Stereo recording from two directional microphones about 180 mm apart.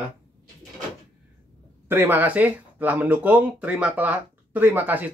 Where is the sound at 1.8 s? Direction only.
10° right (ahead or behind).